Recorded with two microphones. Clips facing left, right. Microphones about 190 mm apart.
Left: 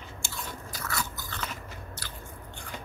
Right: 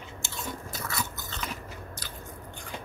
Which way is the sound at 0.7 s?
20° right (ahead or behind).